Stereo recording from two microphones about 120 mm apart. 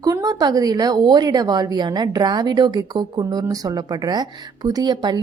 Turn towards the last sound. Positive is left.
turn(degrees=-35)  # may be behind; listen again after turning